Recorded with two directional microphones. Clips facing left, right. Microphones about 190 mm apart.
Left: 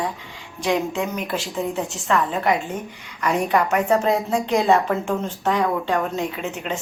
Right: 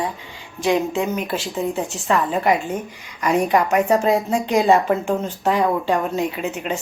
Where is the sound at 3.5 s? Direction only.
15° right (ahead or behind).